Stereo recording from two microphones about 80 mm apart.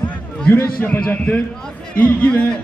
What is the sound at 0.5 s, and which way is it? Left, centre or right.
A man's voice, left.